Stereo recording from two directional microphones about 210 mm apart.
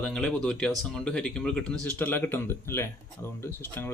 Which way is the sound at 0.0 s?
5° left (ahead or behind).